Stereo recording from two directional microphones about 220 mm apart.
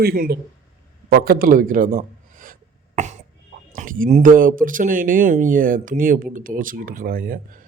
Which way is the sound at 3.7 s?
40° right (ahead or behind).